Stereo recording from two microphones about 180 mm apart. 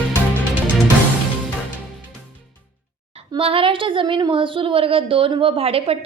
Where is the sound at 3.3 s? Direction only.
30° right (ahead or behind).